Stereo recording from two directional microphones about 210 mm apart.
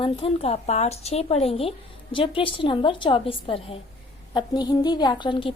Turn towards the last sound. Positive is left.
turn(degrees=20)  # may be behind; listen again after turning